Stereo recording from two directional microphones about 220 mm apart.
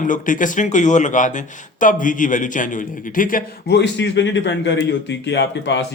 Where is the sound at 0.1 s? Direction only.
35° left (ahead or behind).